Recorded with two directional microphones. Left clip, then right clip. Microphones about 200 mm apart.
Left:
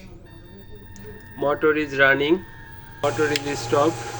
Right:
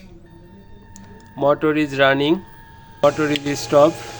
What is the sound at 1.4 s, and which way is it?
Speech, 45° right (ahead or behind).